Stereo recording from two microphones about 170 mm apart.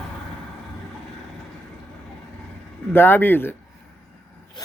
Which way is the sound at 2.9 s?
10° left (ahead or behind).